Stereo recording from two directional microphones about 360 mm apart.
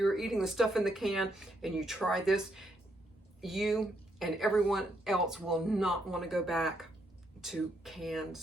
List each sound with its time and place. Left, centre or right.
0.0 s speech: centre